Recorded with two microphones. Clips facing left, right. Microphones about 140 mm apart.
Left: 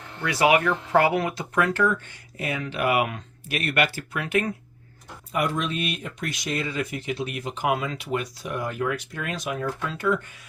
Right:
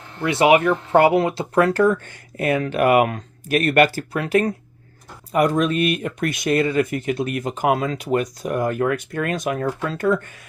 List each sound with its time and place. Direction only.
0.2 s speech: 25° right (ahead or behind); by 10.4 s 50° right (ahead or behind)